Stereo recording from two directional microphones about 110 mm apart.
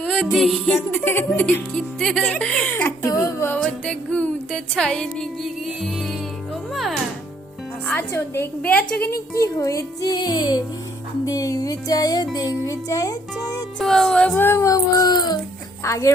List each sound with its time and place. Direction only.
0.0 s music: 5° left (ahead or behind)
0.3 s a sound: 5° right (ahead or behind)
0.9 s a woman's voice: 20° left (ahead or behind)
2.0 s a woman's voice: 5° left (ahead or behind); by 3.6 s 25° left (ahead or behind)
3.6 s speech: 10° left (ahead or behind)
4.7 s a sound: 5° left (ahead or behind)
7.9 s a woman's voice: 25° left (ahead or behind); by 10.6 s 40° left (ahead or behind)
11.3 s music: 30° left (ahead or behind)
13.7 s a sound: centre (ahead or behind)
14.3 s music: 20° left (ahead or behind); by 15.4 s 40° left (ahead or behind)
15.8 s a woman's voice: 30° left (ahead or behind)